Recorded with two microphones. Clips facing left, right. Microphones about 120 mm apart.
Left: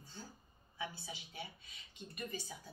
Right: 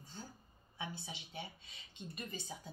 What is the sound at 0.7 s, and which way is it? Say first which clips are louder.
Speech: even; 25° right (ahead or behind).